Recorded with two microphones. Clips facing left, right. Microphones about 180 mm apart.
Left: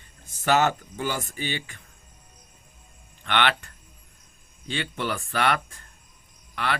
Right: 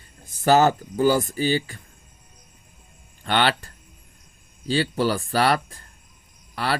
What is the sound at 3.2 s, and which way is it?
Speech, 35° right (ahead or behind).